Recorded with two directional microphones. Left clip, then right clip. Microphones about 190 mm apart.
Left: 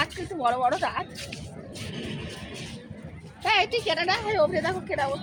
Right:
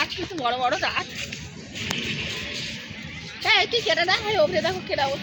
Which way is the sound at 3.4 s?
20° right (ahead or behind).